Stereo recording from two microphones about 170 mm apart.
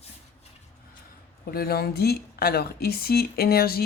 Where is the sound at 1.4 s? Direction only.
65° left (ahead or behind).